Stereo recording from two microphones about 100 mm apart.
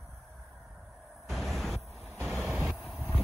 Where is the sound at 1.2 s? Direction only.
Centre (ahead or behind).